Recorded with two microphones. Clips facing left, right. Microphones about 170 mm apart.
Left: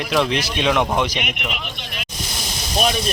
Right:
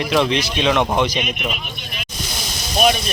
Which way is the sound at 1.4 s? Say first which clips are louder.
Right 2 dB; 80° left.